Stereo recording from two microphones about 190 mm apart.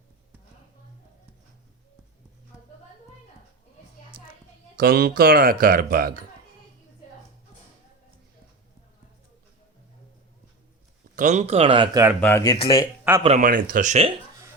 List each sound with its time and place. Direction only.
4.1 s a sound: 50° right (ahead or behind)
4.8 s speech: 50° right (ahead or behind)
11.1 s speech: 40° right (ahead or behind)
12.2 s speech: 15° left (ahead or behind)
12.5 s speech: 30° left (ahead or behind)
12.8 s speech: 10° right (ahead or behind)
13.2 s speech: 40° right (ahead or behind)